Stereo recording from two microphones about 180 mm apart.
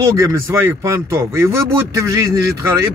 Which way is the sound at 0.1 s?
15° right (ahead or behind).